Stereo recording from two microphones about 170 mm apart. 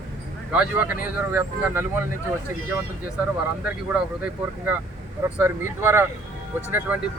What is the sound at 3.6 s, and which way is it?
Speech, 10° right (ahead or behind).